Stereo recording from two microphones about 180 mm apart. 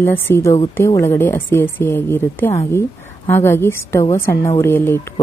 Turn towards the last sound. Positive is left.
turn(degrees=15)  # may be behind; listen again after turning